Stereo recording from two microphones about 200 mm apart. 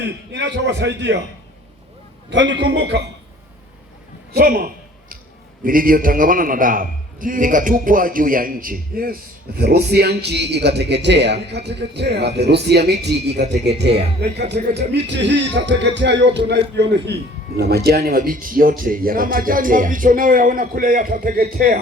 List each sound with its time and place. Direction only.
0.0 s a man's voice: 60° right (ahead or behind)
2.3 s a man's voice: 60° right (ahead or behind)
4.4 s a man's voice: 45° right (ahead or behind)
5.6 s a man's voice: 45° right (ahead or behind)